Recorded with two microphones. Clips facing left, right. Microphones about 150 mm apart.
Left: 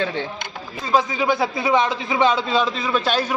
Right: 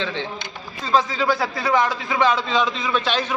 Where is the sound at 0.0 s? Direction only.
50° left (ahead or behind).